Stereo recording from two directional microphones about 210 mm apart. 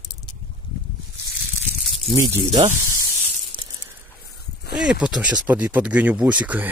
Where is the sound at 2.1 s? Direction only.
15° right (ahead or behind).